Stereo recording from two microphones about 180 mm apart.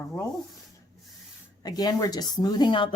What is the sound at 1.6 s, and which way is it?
A woman's voice, 20° left (ahead or behind).